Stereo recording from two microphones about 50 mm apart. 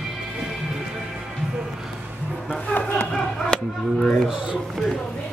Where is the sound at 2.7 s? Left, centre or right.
Left.